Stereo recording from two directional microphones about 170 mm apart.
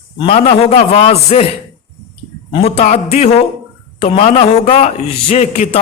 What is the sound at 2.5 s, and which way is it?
A man's voice, 35° left (ahead or behind).